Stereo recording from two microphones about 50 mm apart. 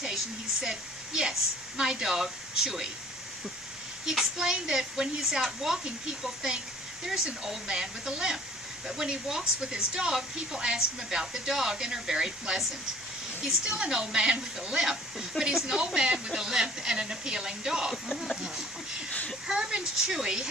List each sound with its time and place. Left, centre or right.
0.6 s speech: centre
4.0 s speech: centre
17.9 s speech: centre
18.4 s speech: centre